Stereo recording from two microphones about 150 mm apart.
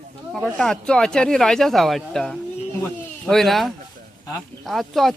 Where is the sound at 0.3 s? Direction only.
Centre (ahead or behind).